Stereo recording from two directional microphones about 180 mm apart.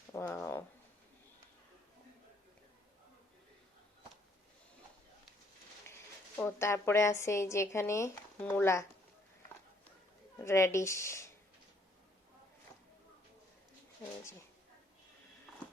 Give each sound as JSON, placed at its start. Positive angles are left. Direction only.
{"t": 0.1, "sound": "a sound", "side_deg": 15}
{"t": 6.3, "sound": "a woman's voice", "side_deg": 15}
{"t": 10.3, "sound": "a woman's voice", "side_deg": 15}